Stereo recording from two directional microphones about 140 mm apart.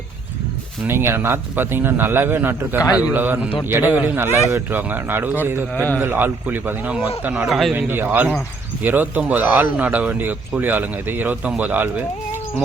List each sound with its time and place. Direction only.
0.9 s speech: 15° right (ahead or behind)
7.4 s speech: centre (ahead or behind)
7.7 s speech: 15° right (ahead or behind)